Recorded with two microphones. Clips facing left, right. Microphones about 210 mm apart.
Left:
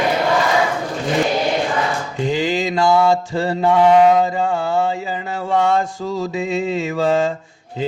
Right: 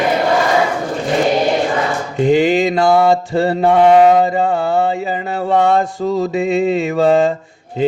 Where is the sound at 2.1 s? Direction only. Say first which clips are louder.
Right 8 dB; 60° right (ahead or behind).